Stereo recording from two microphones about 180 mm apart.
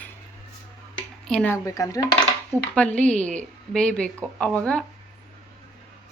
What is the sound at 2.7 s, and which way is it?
Speech, 5° left (ahead or behind).